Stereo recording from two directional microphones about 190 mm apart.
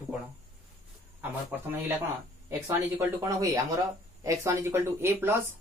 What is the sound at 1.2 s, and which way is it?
Speech, 10° right (ahead or behind).